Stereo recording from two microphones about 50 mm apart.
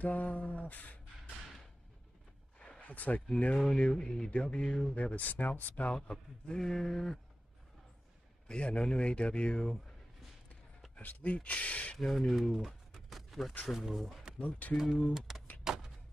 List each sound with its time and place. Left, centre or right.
0.0 s a sound: left
2.9 s speech: left
3.5 s a man's voice: centre
4.9 s speech: left
5.9 s speech: centre
8.5 s a man's voice: left
11.0 s a man's voice: left
12.0 s speech: centre
12.4 s a sound: centre
13.7 s speech: centre
14.4 s a man's voice: left
15.1 s speech: centre
15.6 s a sound: centre